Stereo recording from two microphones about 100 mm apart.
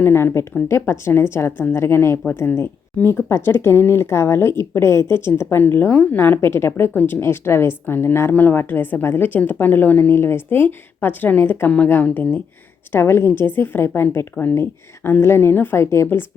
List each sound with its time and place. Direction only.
0.0 s a woman's voice: 25° left (ahead or behind)
12.9 s a woman's voice: 25° left (ahead or behind)